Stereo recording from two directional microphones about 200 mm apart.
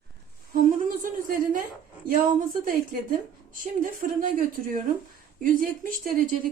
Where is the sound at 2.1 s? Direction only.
45° right (ahead or behind).